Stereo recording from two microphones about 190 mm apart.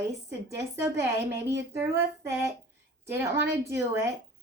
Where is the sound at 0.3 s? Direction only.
15° right (ahead or behind).